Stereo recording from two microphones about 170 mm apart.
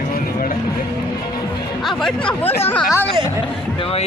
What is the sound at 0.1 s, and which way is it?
Vehicle, 55° left (ahead or behind).